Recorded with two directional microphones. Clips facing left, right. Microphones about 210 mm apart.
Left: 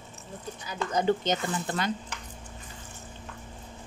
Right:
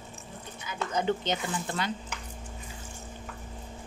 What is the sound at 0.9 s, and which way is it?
Speech, 40° left (ahead or behind).